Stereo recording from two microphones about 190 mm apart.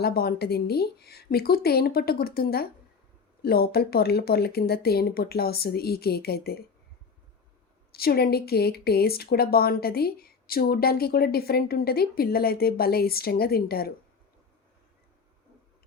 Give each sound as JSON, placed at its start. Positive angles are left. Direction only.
{"t": 0.0, "sound": "speech", "side_deg": 55}
{"t": 7.9, "sound": "speech", "side_deg": 55}